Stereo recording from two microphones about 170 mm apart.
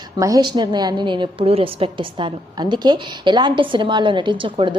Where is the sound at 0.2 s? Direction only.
20° right (ahead or behind).